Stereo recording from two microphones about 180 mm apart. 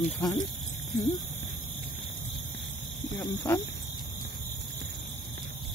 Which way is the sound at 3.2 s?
15° left (ahead or behind).